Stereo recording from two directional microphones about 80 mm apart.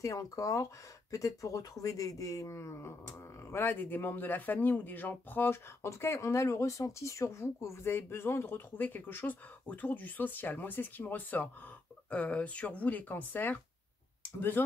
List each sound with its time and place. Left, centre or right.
0.0 s speech: left